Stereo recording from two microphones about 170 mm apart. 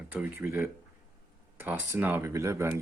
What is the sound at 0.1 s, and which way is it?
Speech, 10° right (ahead or behind).